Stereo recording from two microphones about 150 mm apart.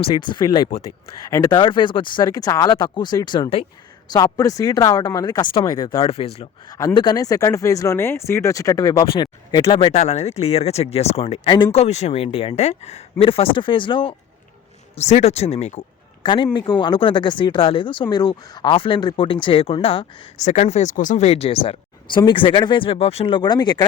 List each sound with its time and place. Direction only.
0.0 s speech: 35° left (ahead or behind)
6.7 s speech: 25° left (ahead or behind)
9.6 s speech: 40° left (ahead or behind)
14.9 s speech: 45° left (ahead or behind)
16.2 s speech: 35° left (ahead or behind)
20.4 s speech: 50° left (ahead or behind); by 23.8 s 30° left (ahead or behind)